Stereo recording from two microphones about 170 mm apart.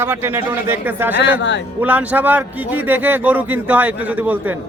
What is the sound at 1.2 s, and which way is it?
Speech, 90° left.